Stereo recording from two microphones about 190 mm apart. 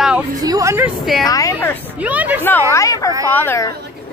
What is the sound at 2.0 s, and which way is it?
Speech, 10° right (ahead or behind).